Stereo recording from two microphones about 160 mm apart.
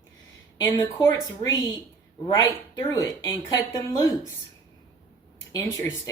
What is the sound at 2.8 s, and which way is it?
Speech, 20° left (ahead or behind).